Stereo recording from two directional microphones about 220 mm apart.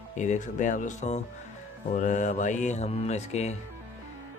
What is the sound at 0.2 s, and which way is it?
Speech, 35° left (ahead or behind).